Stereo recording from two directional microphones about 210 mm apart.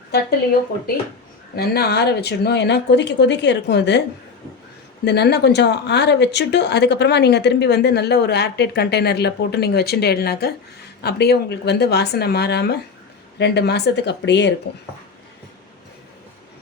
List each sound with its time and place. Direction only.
1.5 s speech: 50° left (ahead or behind)
5.0 s speech: 50° left (ahead or behind)